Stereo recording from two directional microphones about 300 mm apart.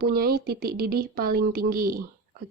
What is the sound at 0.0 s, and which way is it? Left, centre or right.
A woman's voice, right.